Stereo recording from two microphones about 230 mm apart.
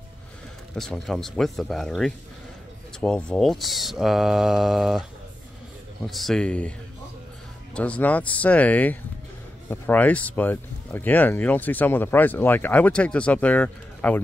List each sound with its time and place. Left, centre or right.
0.7 s speech: centre
6.0 s speech: centre
7.7 s speech: centre